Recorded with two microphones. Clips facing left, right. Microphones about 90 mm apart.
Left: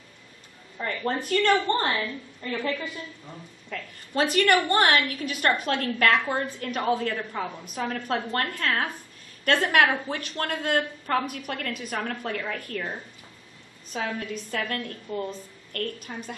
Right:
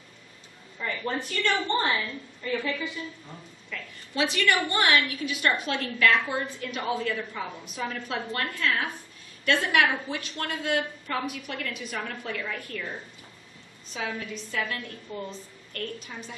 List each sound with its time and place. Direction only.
0.8 s a woman's voice: 45° left (ahead or behind)